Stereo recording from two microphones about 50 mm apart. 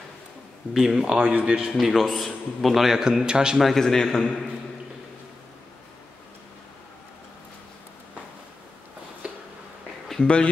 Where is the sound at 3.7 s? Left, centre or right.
Centre.